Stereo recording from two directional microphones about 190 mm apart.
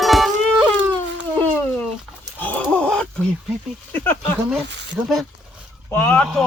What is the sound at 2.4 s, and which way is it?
Speech, 10° left (ahead or behind).